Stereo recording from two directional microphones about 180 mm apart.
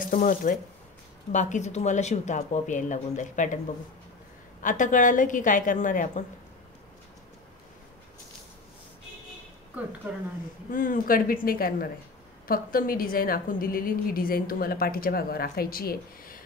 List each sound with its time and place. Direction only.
0.0 s speech: 50° left (ahead or behind)
4.6 s a woman's voice: 45° left (ahead or behind)
10.1 s speech: 10° right (ahead or behind)
10.7 s a woman's voice: 50° left (ahead or behind)